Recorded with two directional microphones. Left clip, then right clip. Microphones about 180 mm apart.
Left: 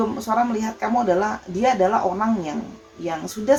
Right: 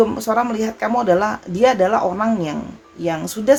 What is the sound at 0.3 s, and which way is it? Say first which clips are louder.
Speech: right 3 dB; 45° right (ahead or behind).